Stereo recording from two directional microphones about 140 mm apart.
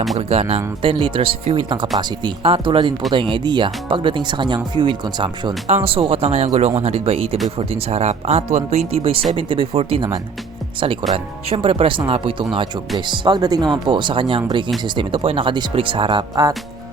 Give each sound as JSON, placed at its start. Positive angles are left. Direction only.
{"t": 0.2, "sound": "speech", "side_deg": -45}
{"t": 5.6, "sound": "speech", "side_deg": -45}
{"t": 11.1, "sound": "speech", "side_deg": -45}